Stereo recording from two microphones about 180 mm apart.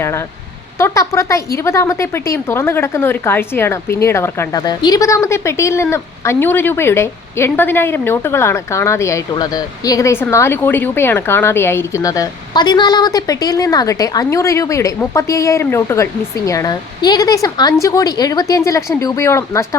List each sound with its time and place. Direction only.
0.0 s a woman's voice: 15° left (ahead or behind)